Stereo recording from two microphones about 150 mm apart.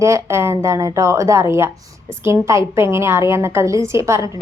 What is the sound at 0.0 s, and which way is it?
A woman's voice, 20° right (ahead or behind).